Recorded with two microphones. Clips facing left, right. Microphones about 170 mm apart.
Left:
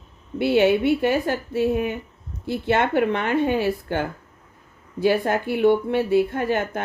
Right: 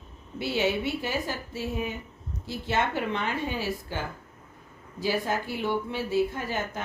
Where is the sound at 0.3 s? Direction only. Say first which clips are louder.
Left 9 dB; 60° left (ahead or behind).